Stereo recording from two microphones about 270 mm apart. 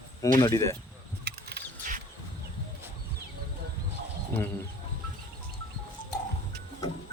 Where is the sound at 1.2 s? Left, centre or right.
Right.